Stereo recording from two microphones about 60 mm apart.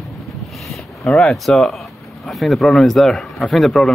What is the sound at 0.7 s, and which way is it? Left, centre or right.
A man's voice, centre.